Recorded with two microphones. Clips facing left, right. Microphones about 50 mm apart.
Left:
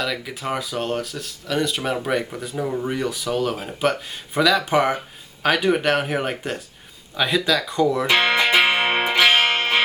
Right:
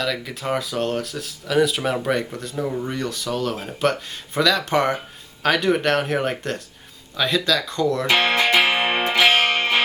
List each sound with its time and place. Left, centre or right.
0.0 s speech: centre; by 8.5 s left
8.8 s music: left